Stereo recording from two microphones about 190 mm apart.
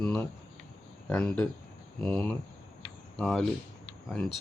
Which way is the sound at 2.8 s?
5° left (ahead or behind).